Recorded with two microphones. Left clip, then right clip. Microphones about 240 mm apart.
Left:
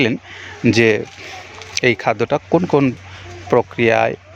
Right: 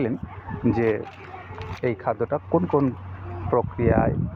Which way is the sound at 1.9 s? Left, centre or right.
Left.